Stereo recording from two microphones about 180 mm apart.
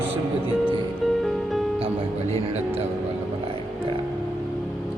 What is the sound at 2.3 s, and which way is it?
Speech, 35° right (ahead or behind).